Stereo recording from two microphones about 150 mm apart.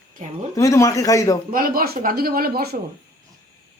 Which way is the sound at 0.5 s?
20° left (ahead or behind).